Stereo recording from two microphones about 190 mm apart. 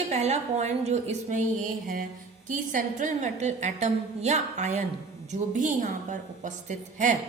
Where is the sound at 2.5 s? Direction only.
45° right (ahead or behind).